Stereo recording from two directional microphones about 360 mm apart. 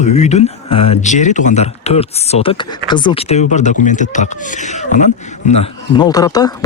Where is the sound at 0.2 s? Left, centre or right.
Centre.